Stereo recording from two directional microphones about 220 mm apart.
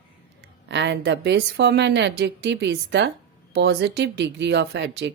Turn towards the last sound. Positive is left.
turn(degrees=-50)  # may be behind; listen again after turning